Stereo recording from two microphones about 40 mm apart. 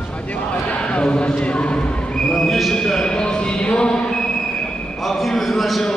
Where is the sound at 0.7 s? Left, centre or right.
Left.